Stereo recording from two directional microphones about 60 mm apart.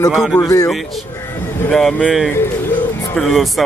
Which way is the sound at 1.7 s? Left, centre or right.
Centre.